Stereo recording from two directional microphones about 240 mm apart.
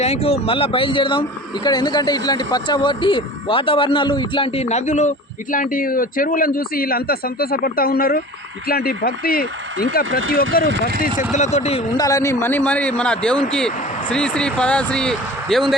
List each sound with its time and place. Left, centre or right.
0.0 s speech: left
10.1 s speech: right
10.7 s speech: right
11.3 s speech: left
11.9 s a man's voice: centre